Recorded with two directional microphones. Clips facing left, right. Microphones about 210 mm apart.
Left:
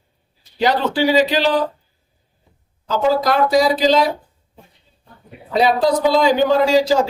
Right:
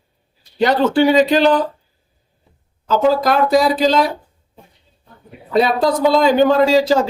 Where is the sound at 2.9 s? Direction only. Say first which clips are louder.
Right 2 dB; 50° right (ahead or behind).